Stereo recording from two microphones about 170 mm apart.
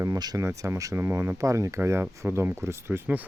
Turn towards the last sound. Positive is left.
turn(degrees=-10)  # may be behind; listen again after turning